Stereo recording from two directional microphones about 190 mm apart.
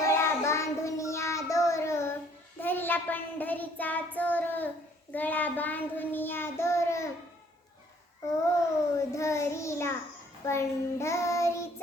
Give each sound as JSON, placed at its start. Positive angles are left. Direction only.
{"t": 0.0, "sound": "child singing", "side_deg": 15}
{"t": 9.0, "sound": "child singing", "side_deg": 15}